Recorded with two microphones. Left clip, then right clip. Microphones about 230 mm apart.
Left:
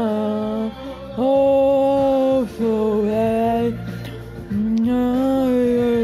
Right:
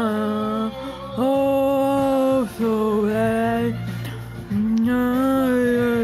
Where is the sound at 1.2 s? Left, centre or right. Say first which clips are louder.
Left 4 dB; centre.